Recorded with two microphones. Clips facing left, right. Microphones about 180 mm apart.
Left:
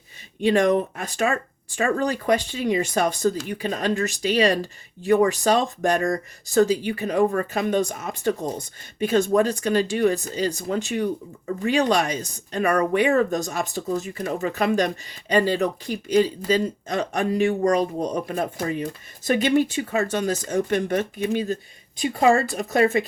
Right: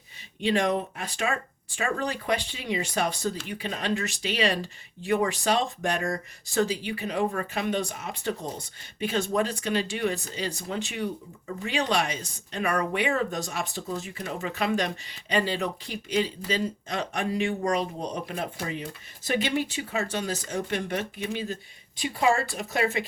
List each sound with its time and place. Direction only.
0.4 s speech: 45° left (ahead or behind)